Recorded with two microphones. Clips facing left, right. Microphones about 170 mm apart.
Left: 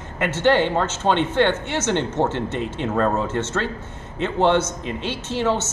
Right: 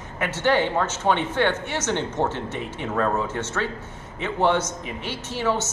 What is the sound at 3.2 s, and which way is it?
Speech, 10° right (ahead or behind).